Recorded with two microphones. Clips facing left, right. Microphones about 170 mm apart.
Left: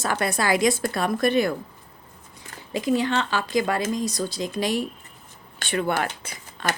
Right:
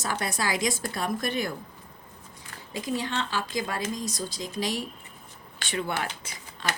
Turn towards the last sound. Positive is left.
turn(degrees=55)  # may be behind; listen again after turning